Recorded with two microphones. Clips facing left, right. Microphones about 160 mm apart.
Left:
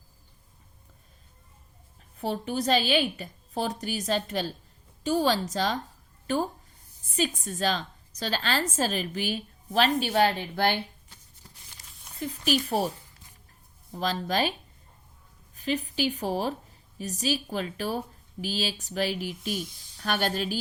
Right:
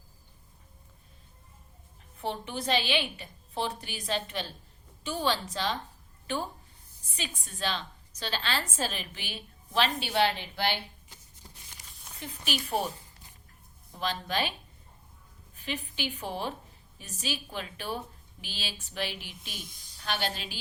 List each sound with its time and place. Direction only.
2.1 s a woman's voice: 40° left (ahead or behind)
12.2 s speech: 40° left (ahead or behind)
13.9 s speech: 40° left (ahead or behind)
15.5 s a woman's voice: 40° left (ahead or behind)